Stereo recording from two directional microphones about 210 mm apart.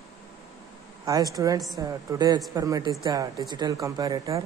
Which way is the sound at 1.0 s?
15° right (ahead or behind).